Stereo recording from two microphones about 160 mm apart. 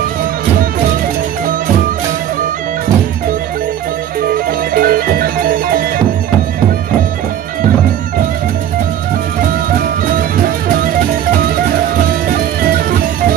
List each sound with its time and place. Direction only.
4.3 s music: 70° right (ahead or behind)
9.4 s music: 60° right (ahead or behind)